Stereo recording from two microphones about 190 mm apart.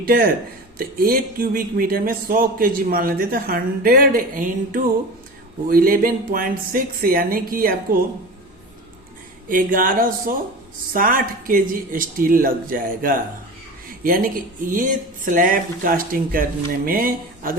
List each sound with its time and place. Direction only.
0.0 s speech: 50° right (ahead or behind)
9.5 s speech: 45° right (ahead or behind)